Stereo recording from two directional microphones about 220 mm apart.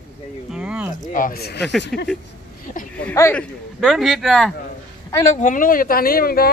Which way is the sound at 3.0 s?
10° left (ahead or behind).